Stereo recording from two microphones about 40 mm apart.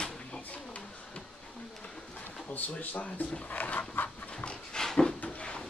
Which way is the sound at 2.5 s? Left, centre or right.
Left.